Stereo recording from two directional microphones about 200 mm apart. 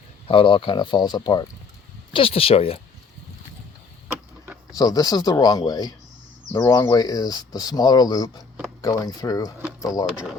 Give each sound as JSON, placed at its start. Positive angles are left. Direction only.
{"t": 0.3, "sound": "speech", "side_deg": 25}
{"t": 4.7, "sound": "speech", "side_deg": 20}